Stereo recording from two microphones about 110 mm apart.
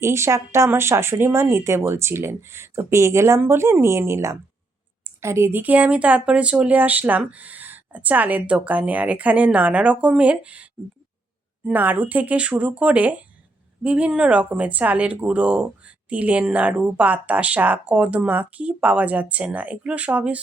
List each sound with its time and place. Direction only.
0.0 s speech: 25° right (ahead or behind)